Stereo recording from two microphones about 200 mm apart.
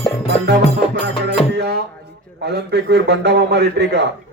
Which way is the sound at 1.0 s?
55° right (ahead or behind).